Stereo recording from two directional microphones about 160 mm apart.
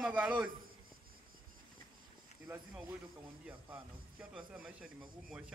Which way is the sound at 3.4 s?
5° right (ahead or behind).